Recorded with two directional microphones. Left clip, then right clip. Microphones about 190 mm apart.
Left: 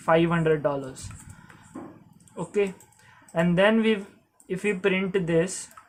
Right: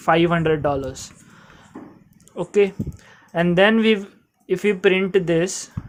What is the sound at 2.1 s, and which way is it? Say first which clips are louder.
Speech: right 8 dB; 40° right (ahead or behind).